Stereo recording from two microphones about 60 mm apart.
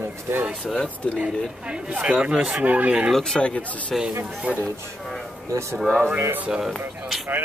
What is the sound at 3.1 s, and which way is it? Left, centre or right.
Speech, centre.